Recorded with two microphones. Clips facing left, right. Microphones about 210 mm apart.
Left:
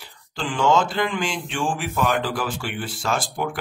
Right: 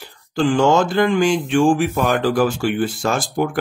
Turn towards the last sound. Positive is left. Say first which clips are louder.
# right 6 dB
turn(degrees=-45)  # may be behind; listen again after turning